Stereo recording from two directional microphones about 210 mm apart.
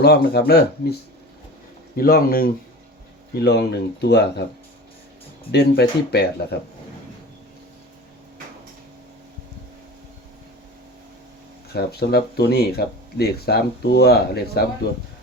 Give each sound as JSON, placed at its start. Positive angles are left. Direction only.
{"t": 0.0, "sound": "speech", "side_deg": 50}
{"t": 2.0, "sound": "speech", "side_deg": 45}
{"t": 5.5, "sound": "speech", "side_deg": 50}
{"t": 11.7, "sound": "speech", "side_deg": 50}